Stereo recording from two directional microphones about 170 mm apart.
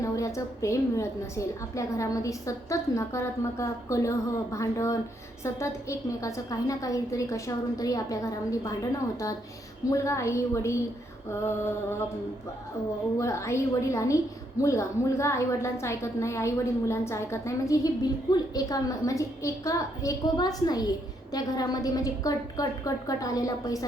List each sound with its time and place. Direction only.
0.0 s a woman's voice: 20° left (ahead or behind)
13.1 s a woman's voice: 20° left (ahead or behind)